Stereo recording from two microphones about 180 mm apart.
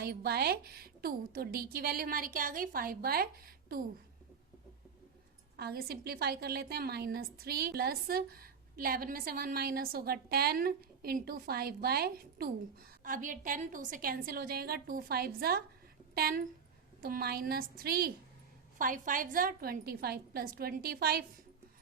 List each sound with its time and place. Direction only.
0.0 s a woman's voice: 60° right (ahead or behind)
5.5 s a woman's voice: 60° right (ahead or behind)